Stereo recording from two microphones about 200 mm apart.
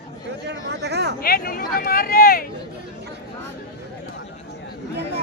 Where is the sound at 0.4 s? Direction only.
55° right (ahead or behind).